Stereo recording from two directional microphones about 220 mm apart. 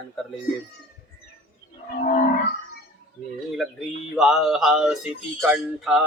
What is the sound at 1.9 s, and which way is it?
Wild animals, 35° left (ahead or behind).